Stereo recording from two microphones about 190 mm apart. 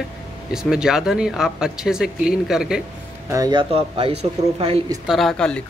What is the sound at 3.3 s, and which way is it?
Speech, 20° right (ahead or behind).